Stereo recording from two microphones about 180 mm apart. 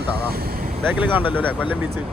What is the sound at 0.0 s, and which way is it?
Vehicle, 60° right (ahead or behind).